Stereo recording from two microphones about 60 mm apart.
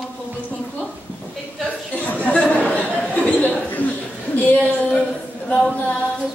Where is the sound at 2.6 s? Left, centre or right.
Centre.